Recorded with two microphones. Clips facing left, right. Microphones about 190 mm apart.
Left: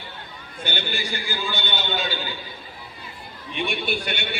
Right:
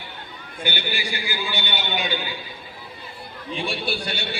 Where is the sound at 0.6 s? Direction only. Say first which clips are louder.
Right 1 dB; 10° right (ahead or behind).